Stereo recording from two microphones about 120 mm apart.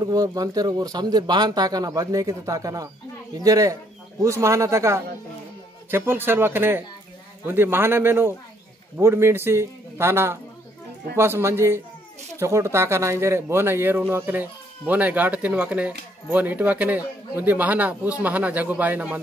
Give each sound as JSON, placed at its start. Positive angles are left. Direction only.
{"t": 0.0, "sound": "a man's voice", "side_deg": -30}